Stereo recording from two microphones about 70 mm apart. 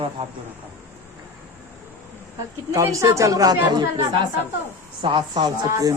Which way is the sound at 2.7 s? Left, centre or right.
Right.